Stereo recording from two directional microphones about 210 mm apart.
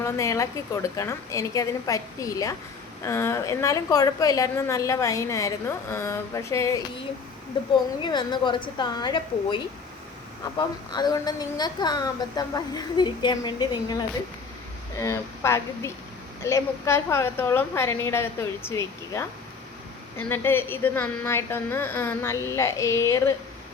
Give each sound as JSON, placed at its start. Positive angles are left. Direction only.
{"t": 0.0, "sound": "a woman's voice", "side_deg": 15}
{"t": 8.0, "sound": "a woman's voice", "side_deg": 20}
{"t": 10.9, "sound": "a woman's voice", "side_deg": 20}